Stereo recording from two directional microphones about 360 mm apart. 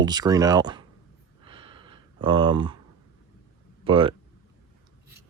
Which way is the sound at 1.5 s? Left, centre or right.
Centre.